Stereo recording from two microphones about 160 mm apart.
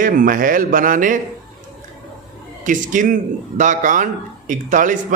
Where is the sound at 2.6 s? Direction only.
55° right (ahead or behind).